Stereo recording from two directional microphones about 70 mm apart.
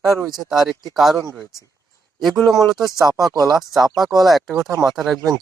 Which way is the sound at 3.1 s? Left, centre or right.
Right.